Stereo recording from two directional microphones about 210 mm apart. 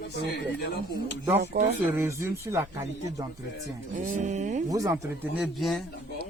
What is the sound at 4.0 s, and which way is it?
Music, 35° right (ahead or behind).